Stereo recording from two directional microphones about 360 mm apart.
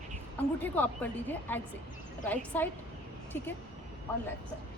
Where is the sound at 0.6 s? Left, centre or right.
Centre.